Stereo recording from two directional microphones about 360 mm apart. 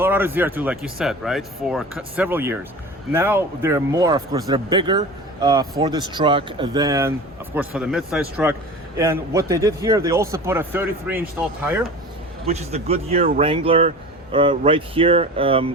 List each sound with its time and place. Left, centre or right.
0.0 s speech: centre
12.5 s speech: centre